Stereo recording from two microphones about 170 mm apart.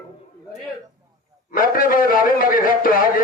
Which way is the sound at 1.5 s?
55° left (ahead or behind).